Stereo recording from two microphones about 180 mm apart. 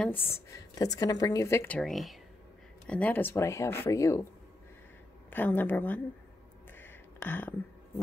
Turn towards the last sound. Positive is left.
turn(degrees=10)  # may be behind; listen again after turning